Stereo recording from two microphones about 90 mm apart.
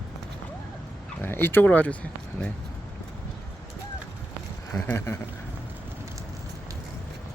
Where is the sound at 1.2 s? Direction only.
25° left (ahead or behind).